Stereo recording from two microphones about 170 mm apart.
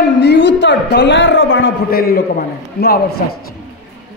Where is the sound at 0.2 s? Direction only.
90° left; by 3.0 s 60° left (ahead or behind).